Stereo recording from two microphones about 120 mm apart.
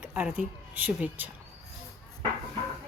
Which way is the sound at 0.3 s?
15° right (ahead or behind).